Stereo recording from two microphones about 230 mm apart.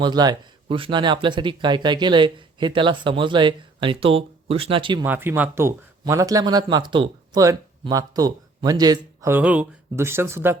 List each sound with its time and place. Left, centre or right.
0.0 s speech: centre
5.0 s speech: centre